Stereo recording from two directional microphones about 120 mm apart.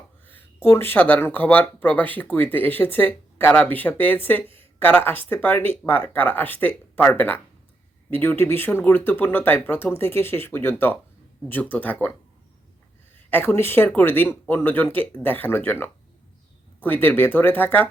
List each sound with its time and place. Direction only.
0.3 s speech: 20° left (ahead or behind)
13.3 s speech: 20° left (ahead or behind)